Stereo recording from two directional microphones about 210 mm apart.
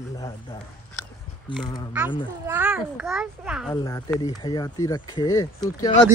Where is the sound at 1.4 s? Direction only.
20° left (ahead or behind).